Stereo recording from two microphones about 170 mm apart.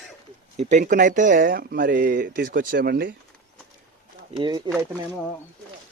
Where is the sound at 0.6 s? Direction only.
45° right (ahead or behind); by 3.1 s 65° right (ahead or behind).